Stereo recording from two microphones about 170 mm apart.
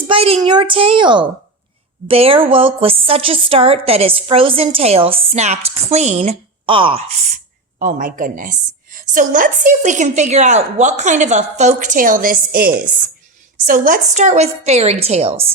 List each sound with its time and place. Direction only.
0.1 s a woman's voice: 30° right (ahead or behind)
7.8 s a woman's voice: 50° right (ahead or behind)
14.2 s a woman's voice: 45° right (ahead or behind)